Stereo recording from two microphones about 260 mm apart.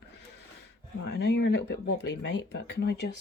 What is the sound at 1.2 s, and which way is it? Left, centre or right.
Speech, left.